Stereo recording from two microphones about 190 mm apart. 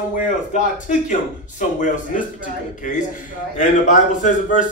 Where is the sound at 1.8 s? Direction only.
45° left (ahead or behind).